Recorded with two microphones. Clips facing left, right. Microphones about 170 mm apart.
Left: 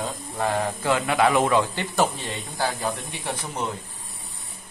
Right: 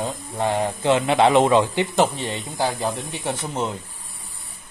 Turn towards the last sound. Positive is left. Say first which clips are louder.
# right 4 dB
turn(degrees=-25)  # may be behind; listen again after turning